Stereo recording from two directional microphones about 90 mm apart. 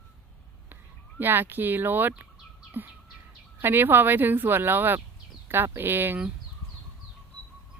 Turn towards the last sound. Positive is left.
turn(degrees=-25)  # may be behind; listen again after turning